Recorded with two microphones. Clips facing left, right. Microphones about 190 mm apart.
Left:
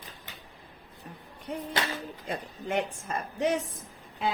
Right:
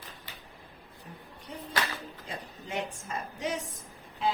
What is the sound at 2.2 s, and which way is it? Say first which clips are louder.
A woman's voice: left 6 dB; 55° left (ahead or behind).